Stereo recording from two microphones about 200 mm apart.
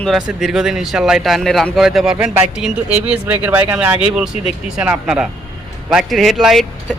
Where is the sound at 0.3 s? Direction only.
Centre (ahead or behind).